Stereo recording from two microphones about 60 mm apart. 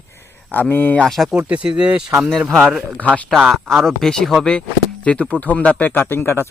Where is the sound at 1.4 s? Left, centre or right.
Right.